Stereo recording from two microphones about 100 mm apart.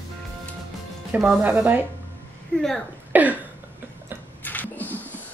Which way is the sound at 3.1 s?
15° right (ahead or behind).